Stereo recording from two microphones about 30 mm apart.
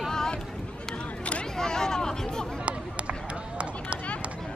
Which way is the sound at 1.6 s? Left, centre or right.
Centre.